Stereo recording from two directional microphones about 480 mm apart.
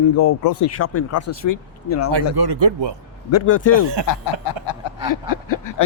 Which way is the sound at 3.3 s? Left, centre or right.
Left.